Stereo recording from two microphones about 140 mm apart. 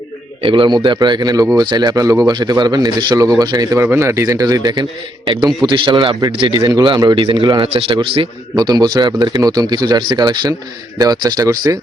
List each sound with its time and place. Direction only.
0.4 s a man's voice: 35° right (ahead or behind)
6.6 s a man's voice: 25° right (ahead or behind)
8.5 s a man's voice: 30° right (ahead or behind)